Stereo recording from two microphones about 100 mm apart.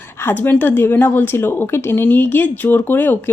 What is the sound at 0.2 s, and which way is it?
A woman's voice, 20° left (ahead or behind).